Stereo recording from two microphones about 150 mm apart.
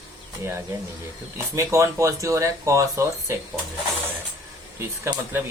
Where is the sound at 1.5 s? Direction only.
20° right (ahead or behind).